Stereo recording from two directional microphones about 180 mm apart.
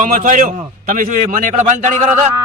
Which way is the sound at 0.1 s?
50° right (ahead or behind).